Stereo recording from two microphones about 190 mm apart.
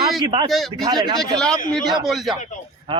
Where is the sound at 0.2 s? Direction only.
25° right (ahead or behind).